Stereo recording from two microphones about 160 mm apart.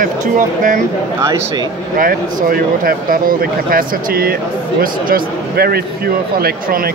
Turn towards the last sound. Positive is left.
turn(degrees=-70)  # may be behind; listen again after turning